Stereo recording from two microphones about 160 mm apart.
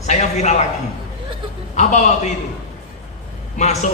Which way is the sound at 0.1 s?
45° left (ahead or behind).